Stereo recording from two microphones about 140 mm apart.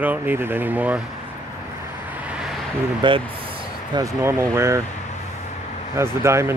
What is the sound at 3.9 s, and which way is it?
Speech, 20° right (ahead or behind).